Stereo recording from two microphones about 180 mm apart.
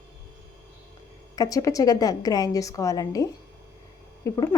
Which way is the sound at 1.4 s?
20° left (ahead or behind).